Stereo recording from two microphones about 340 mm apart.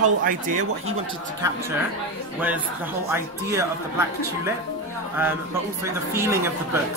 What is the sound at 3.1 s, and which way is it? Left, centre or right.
Speech, centre.